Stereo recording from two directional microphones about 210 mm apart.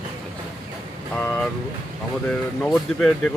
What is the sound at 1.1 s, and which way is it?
Speech, 5° left (ahead or behind).